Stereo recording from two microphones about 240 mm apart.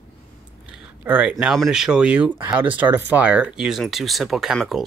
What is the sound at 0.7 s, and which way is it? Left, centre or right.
Speech, centre.